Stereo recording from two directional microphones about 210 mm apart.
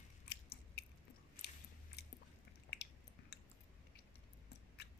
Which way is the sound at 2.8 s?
50° left (ahead or behind).